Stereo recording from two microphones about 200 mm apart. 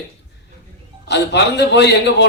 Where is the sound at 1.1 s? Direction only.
60° left (ahead or behind).